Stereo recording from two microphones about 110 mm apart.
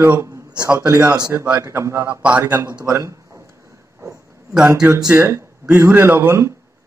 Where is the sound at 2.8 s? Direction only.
25° right (ahead or behind).